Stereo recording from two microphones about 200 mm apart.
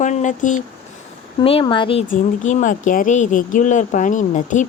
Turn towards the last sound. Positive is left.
turn(degrees=40)  # may be behind; listen again after turning